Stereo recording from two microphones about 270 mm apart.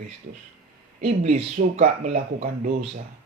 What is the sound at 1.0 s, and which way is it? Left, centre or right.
Speech, right.